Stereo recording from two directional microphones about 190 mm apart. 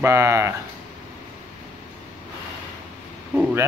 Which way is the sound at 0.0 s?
15° right (ahead or behind).